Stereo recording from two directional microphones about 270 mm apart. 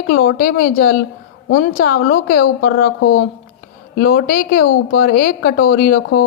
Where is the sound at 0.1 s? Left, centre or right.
Left.